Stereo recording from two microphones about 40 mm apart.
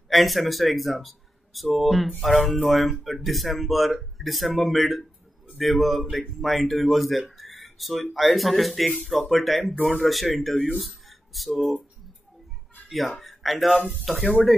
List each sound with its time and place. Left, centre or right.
0.1 s speech: centre
10.5 s speech: left
10.8 s speech: centre
13.2 s speech: centre